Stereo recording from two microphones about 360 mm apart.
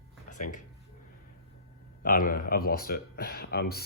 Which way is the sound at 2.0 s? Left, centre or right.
Left.